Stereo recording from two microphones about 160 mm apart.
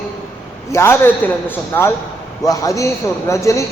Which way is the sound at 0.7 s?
15° left (ahead or behind).